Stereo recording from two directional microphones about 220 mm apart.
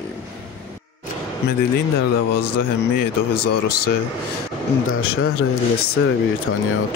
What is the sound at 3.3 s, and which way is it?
Speech, 90° left.